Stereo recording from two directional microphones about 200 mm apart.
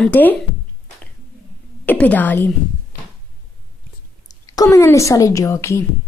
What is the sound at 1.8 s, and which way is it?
Speech, 5° left (ahead or behind).